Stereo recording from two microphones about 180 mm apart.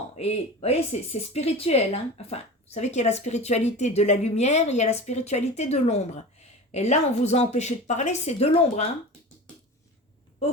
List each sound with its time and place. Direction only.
0.2 s a woman's voice: 35° left (ahead or behind)